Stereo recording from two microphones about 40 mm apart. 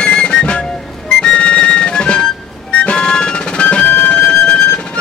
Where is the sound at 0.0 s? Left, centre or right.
Left.